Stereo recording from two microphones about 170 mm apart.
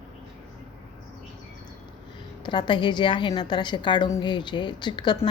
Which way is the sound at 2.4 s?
25° left (ahead or behind).